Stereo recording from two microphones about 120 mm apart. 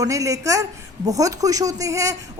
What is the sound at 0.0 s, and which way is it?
A woman's voice, 30° right (ahead or behind).